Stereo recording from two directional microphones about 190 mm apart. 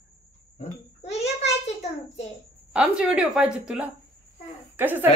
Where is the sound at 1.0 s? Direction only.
35° left (ahead or behind).